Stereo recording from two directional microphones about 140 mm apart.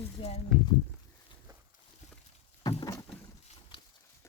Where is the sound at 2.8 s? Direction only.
25° left (ahead or behind).